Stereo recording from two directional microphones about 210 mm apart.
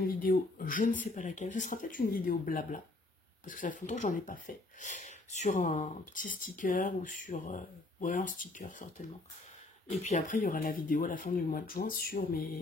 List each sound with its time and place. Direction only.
0.0 s speech: 40° left (ahead or behind)